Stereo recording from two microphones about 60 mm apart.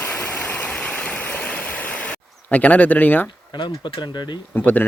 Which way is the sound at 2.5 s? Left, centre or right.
Left.